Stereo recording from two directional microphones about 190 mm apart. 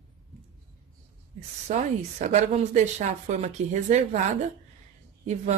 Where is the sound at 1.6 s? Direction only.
35° right (ahead or behind).